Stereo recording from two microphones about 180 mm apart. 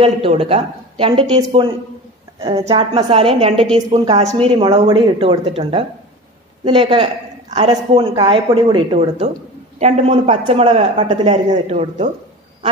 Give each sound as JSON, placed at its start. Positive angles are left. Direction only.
{"t": 0.0, "sound": "a woman's voice", "side_deg": -30}